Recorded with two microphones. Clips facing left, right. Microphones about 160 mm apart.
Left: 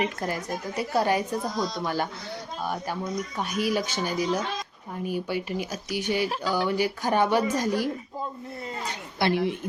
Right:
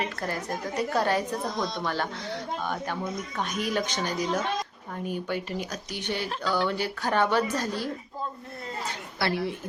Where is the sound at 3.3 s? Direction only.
10° left (ahead or behind).